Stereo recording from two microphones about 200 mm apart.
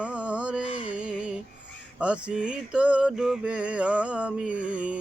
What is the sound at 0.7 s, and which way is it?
Music, 30° left (ahead or behind).